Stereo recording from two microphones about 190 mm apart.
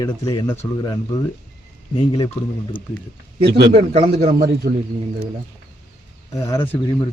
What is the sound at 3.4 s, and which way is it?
Speech, 60° right (ahead or behind).